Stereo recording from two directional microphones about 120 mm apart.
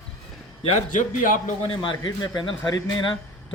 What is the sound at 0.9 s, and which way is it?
Speech, 90° left.